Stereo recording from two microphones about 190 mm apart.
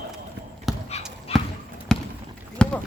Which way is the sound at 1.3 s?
30° left (ahead or behind).